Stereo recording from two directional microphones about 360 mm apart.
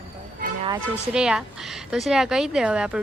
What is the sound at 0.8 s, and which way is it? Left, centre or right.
Speech, centre.